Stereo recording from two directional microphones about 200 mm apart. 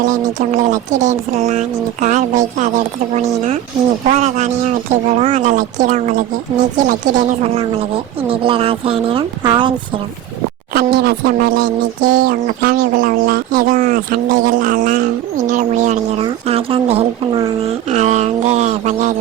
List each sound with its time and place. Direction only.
0.0 s speech: 40° right (ahead or behind)
10.8 s speech: 50° right (ahead or behind)